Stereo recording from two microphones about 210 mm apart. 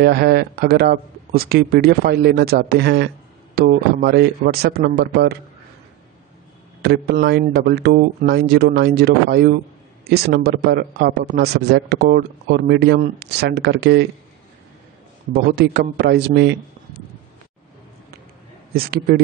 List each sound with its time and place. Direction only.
0.0 s speech: 50° right (ahead or behind)
6.8 s speech: 50° right (ahead or behind)
15.3 s speech: 50° right (ahead or behind)
18.7 s speech: 45° right (ahead or behind)